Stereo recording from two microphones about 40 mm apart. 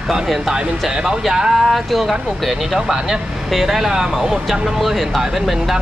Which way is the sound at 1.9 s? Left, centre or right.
Centre.